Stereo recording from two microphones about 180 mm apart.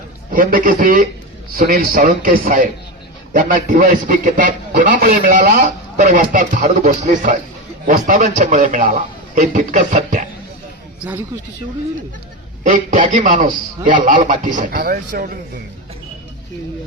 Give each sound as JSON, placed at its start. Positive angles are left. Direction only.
{"t": 0.3, "sound": "a man's voice", "side_deg": -50}
{"t": 12.6, "sound": "a man's voice", "side_deg": -45}